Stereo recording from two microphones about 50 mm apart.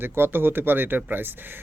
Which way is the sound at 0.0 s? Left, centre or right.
Right.